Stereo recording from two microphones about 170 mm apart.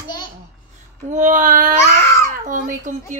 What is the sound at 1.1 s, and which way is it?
A child's voice, 50° right (ahead or behind).